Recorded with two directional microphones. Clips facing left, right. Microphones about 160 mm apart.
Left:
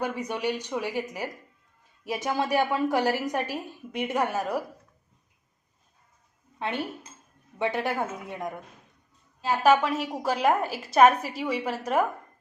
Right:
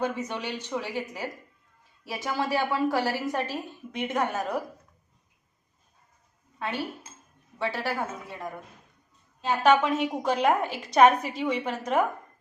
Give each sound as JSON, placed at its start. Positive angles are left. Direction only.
{"t": 0.0, "sound": "a woman's voice", "side_deg": 10}
{"t": 6.6, "sound": "a woman's voice", "side_deg": 20}
{"t": 9.4, "sound": "a woman's voice", "side_deg": 5}